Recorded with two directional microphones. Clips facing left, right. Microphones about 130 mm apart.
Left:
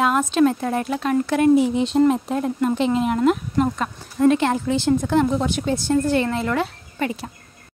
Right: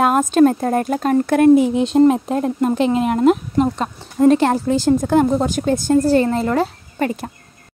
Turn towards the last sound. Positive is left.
turn(degrees=-45)  # may be behind; listen again after turning